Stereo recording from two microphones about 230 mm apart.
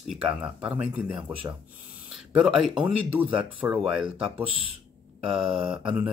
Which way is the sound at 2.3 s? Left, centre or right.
Centre.